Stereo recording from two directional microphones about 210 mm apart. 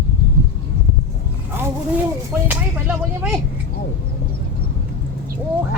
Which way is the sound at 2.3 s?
5° right (ahead or behind).